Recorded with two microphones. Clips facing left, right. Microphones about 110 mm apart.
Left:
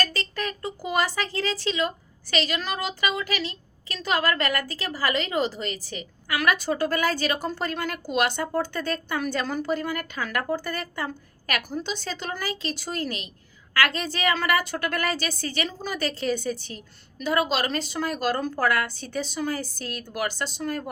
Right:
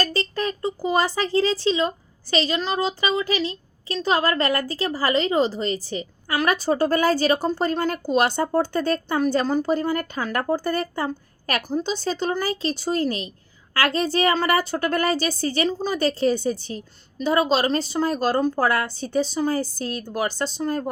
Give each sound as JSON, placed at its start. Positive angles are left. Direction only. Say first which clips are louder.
{"t": 0.0, "sound": "a woman's voice", "louder": "right 4 dB", "side_deg": -30}